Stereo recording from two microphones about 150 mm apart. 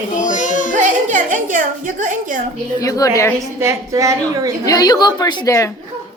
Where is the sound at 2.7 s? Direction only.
25° left (ahead or behind).